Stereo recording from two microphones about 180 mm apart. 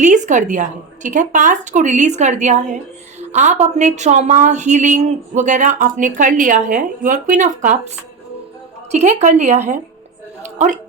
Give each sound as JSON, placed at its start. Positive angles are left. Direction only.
{"t": 0.0, "sound": "speech", "side_deg": -45}
{"t": 8.9, "sound": "a woman's voice", "side_deg": -40}